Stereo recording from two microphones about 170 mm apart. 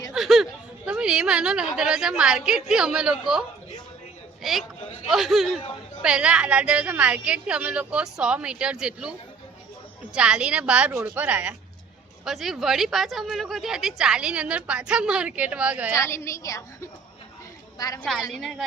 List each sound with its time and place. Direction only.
0.1 s chatter: centre (ahead or behind)
0.9 s speech: 5° right (ahead or behind)
4.4 s a woman's voice: centre (ahead or behind)
10.2 s a woman's voice: 5° right (ahead or behind)
16.0 s a woman's voice: 15° left (ahead or behind)
17.7 s a woman's voice: 20° left (ahead or behind)
18.0 s speech: centre (ahead or behind)